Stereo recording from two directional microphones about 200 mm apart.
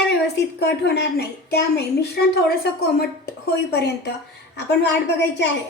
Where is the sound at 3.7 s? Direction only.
55° left (ahead or behind).